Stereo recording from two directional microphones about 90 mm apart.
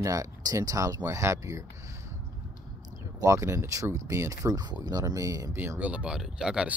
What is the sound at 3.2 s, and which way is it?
Speech, 35° right (ahead or behind).